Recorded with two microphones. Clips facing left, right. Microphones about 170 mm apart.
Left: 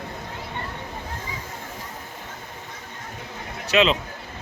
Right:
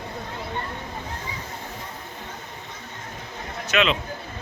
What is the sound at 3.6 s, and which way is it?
Speech, 35° left (ahead or behind).